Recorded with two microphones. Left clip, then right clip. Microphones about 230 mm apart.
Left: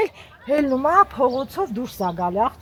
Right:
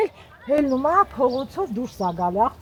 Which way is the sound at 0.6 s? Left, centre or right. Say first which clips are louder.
Left 2 dB; left.